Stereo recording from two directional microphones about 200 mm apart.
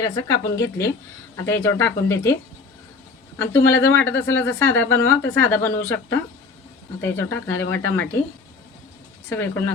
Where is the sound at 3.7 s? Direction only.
10° left (ahead or behind).